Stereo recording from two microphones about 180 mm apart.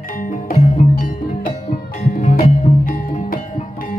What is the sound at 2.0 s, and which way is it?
Music, 50° left (ahead or behind).